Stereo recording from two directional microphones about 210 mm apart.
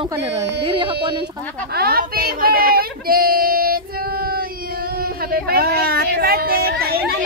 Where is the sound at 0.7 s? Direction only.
25° right (ahead or behind).